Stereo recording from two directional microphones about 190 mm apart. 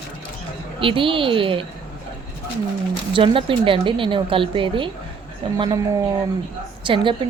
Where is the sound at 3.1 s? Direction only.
25° right (ahead or behind).